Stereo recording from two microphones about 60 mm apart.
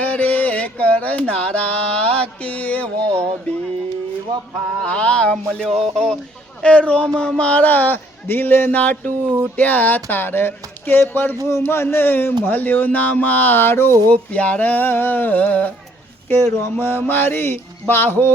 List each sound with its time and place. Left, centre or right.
0.0 s a sound: left
3.5 s music: left
4.8 s speech: centre
5.6 s speech: centre
6.6 s speech: centre
11.4 s speech: left
14.1 s speech: left
16.3 s speech: left